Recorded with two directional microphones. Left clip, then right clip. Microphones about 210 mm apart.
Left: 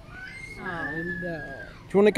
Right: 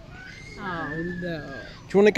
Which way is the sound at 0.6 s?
40° right (ahead or behind).